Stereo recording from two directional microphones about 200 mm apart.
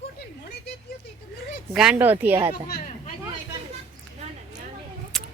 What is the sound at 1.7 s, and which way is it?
Speech, 5° right (ahead or behind).